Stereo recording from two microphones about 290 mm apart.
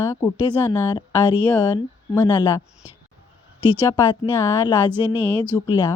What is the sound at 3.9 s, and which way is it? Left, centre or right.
Speech, centre.